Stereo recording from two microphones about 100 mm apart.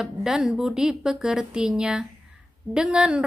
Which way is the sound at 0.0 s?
5° right (ahead or behind).